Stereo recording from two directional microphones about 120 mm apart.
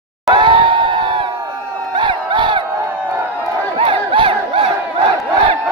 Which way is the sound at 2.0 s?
40° right (ahead or behind).